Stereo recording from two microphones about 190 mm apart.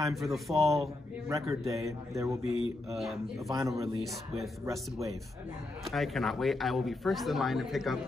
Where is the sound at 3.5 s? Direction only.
20° right (ahead or behind).